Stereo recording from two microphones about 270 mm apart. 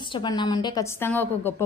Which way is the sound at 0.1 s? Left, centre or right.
Centre.